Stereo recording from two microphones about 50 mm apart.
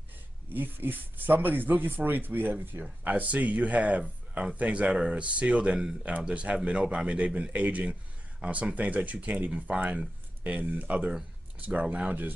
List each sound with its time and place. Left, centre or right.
0.5 s speech: right